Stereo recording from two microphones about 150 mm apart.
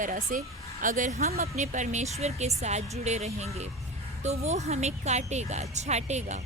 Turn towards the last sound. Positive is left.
turn(degrees=-50)  # may be behind; listen again after turning